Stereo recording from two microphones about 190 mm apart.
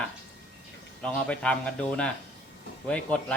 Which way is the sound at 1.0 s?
5° left (ahead or behind).